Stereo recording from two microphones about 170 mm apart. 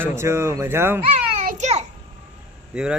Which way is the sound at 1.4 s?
40° right (ahead or behind).